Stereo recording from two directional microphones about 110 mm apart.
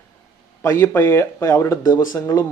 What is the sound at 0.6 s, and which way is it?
Speech, 25° left (ahead or behind).